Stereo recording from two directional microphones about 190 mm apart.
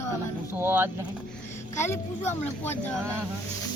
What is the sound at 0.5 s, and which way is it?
Speech, 10° right (ahead or behind).